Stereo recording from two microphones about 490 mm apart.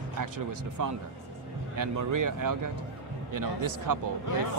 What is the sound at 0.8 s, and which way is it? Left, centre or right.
Speech, right.